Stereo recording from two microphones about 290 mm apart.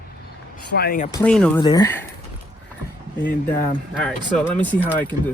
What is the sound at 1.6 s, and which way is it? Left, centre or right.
Speech, centre.